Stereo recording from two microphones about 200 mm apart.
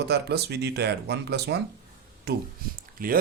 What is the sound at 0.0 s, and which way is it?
Speech, 55° right (ahead or behind).